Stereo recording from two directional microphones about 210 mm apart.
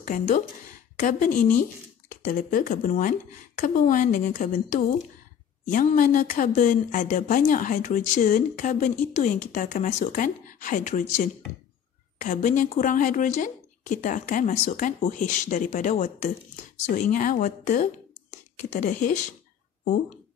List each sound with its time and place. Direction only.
0.0 s speech: 40° left (ahead or behind)